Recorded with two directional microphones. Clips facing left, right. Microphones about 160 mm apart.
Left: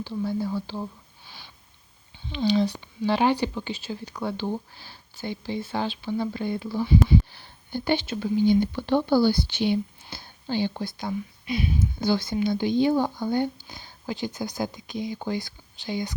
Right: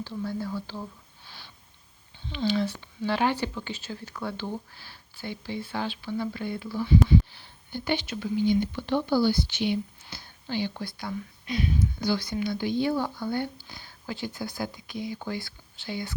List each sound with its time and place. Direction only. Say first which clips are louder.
0.0 s speech: left 4 dB; 10° left (ahead or behind)
2.3 s speech: left 4 dB; 20° left (ahead or behind)
11.4 s speech: left 1 dB; 10° left (ahead or behind)
11.8 s speech: left 3 dB; 25° left (ahead or behind)